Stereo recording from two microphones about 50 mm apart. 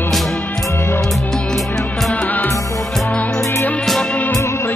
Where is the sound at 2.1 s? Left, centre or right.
Left.